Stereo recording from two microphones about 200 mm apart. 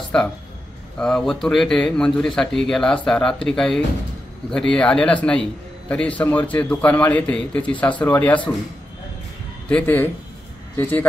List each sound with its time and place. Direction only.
0.9 s a man's voice: 5° left (ahead or behind)
9.7 s a man's voice: 10° left (ahead or behind)